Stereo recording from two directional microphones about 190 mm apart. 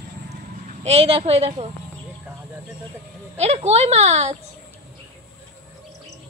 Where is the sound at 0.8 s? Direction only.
30° right (ahead or behind).